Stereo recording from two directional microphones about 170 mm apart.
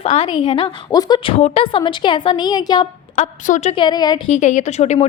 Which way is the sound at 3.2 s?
45° left (ahead or behind).